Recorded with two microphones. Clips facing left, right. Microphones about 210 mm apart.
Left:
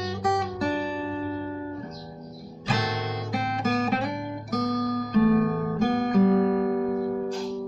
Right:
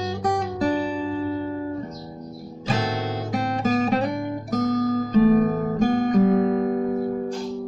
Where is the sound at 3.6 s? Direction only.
30° right (ahead or behind).